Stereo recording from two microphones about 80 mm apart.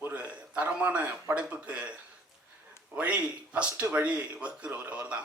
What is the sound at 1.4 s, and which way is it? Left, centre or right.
Speech, centre.